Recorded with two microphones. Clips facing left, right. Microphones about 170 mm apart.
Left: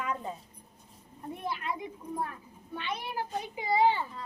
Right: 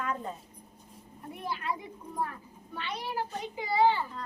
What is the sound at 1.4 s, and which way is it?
Speech, 20° left (ahead or behind).